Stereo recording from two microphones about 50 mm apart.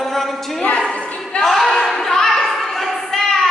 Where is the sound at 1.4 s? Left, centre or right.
Centre.